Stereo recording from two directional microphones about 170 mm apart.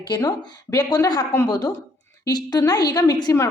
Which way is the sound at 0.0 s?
25° left (ahead or behind).